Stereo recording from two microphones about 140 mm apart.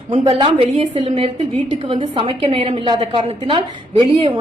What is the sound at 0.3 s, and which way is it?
A woman's voice, 40° right (ahead or behind).